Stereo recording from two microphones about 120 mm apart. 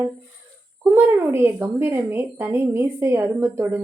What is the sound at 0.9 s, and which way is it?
A woman's voice, 20° right (ahead or behind).